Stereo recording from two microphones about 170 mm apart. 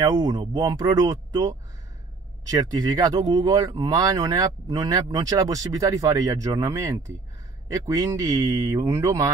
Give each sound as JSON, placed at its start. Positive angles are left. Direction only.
{"t": 0.0, "sound": "speech", "side_deg": -25}
{"t": 2.7, "sound": "speech", "side_deg": -20}